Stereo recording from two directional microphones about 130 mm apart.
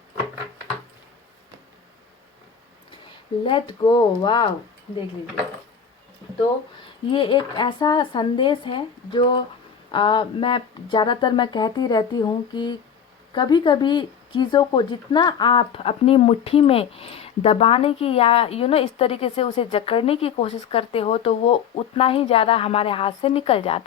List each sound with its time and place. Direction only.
3.4 s speech: 40° left (ahead or behind)
6.8 s speech: 40° left (ahead or behind)